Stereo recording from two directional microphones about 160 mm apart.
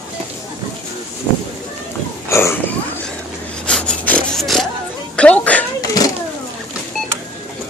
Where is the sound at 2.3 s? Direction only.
15° left (ahead or behind).